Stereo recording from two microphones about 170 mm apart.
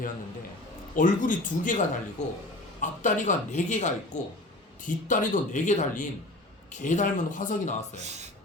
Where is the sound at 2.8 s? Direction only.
50° left (ahead or behind).